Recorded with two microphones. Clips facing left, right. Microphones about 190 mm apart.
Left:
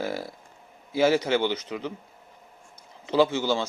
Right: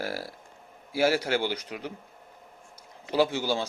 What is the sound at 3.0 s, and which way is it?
Speech, 10° right (ahead or behind).